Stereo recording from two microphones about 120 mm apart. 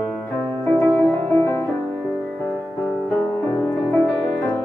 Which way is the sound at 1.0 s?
20° left (ahead or behind).